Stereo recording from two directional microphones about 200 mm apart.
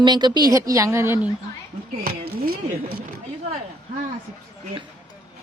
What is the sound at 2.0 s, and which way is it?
Speech, 50° right (ahead or behind).